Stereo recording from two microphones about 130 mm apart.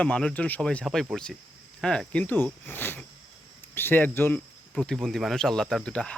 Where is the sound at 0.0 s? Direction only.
5° left (ahead or behind).